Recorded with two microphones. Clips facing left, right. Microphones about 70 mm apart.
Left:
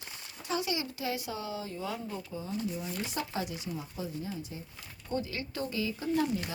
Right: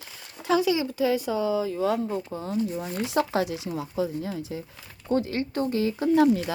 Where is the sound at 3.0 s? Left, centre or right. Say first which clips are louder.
Right 15 dB; right.